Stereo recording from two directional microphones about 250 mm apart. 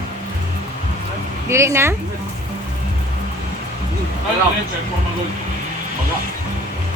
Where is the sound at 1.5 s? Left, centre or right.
Centre.